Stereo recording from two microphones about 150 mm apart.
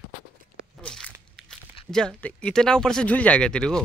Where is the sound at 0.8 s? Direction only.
5° left (ahead or behind).